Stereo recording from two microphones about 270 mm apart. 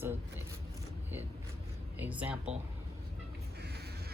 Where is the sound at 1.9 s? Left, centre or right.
Centre.